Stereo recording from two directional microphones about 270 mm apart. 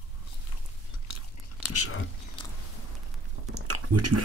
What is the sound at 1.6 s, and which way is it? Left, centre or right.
Speech, left.